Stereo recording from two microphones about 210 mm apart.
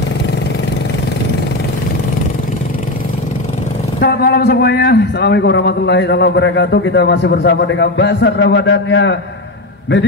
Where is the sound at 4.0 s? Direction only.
50° left (ahead or behind).